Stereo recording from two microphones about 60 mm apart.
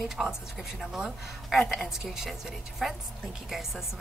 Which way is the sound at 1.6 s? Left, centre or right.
Centre.